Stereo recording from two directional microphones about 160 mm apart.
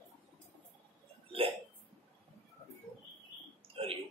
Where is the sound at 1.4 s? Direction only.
35° right (ahead or behind).